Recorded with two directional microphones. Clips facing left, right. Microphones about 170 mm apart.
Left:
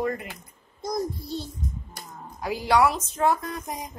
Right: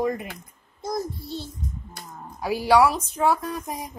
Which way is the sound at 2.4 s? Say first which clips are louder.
Right 3 dB; 10° right (ahead or behind).